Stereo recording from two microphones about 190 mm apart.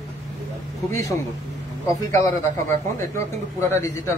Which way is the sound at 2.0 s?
15° left (ahead or behind).